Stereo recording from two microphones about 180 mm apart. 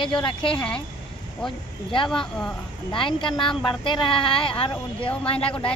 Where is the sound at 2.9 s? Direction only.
30° left (ahead or behind).